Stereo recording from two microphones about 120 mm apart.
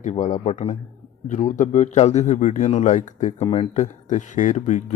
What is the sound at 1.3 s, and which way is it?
Speech, 90° left.